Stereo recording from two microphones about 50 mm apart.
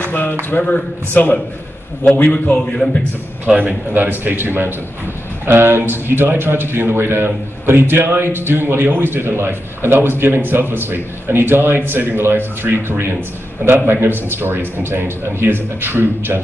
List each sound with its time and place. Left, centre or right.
0.0 s a sound: left
0.5 s speech: left
1.1 s a man's voice: left
3.5 s a man's voice: right